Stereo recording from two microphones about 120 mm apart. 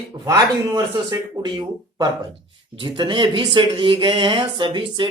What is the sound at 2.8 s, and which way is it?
Speech, 40° right (ahead or behind).